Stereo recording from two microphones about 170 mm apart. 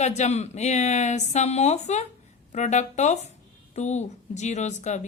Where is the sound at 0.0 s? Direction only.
40° left (ahead or behind).